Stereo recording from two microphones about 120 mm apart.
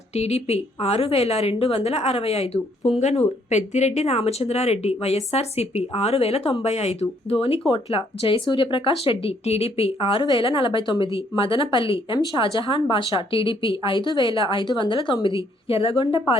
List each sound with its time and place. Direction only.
0.1 s speech: 60° left (ahead or behind)